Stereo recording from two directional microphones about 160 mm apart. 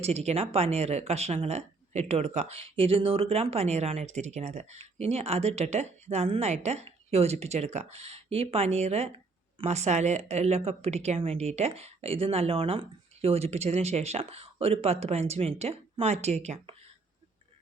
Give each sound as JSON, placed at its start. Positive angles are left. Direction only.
{"t": 0.0, "sound": "speech", "side_deg": -40}